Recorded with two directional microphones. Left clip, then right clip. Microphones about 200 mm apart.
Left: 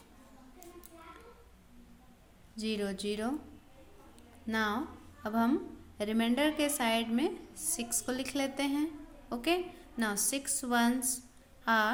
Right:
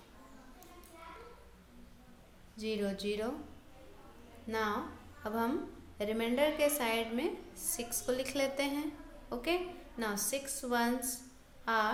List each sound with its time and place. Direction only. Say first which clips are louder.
2.6 s a woman's voice: left 1 dB; 40° left (ahead or behind)
4.4 s a woman's voice: left 2 dB; 40° left (ahead or behind)